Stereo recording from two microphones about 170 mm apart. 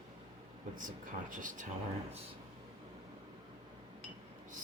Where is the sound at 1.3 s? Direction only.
50° right (ahead or behind).